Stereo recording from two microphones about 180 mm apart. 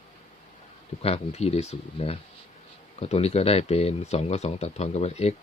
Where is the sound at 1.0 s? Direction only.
35° left (ahead or behind).